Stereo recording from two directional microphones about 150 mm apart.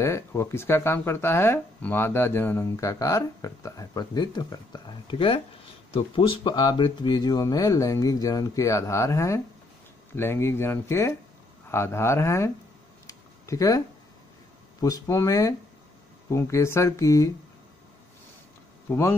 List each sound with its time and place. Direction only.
0.0 s speech: 20° left (ahead or behind)
13.0 s a sound: 20° left (ahead or behind)
14.8 s speech: 20° left (ahead or behind)
18.9 s speech: 15° left (ahead or behind)